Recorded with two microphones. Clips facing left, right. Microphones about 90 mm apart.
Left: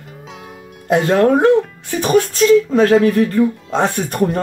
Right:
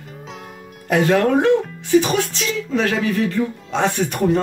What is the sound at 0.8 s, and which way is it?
Speech, 30° left (ahead or behind).